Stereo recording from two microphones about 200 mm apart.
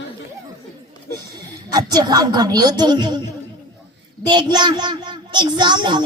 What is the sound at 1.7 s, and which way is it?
A child's voice, 20° right (ahead or behind).